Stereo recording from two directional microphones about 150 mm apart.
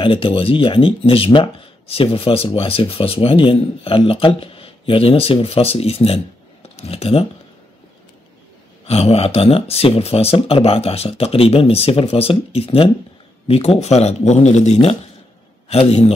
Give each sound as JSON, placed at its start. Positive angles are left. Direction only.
{"t": 0.0, "sound": "speech", "side_deg": 35}
{"t": 8.8, "sound": "speech", "side_deg": 40}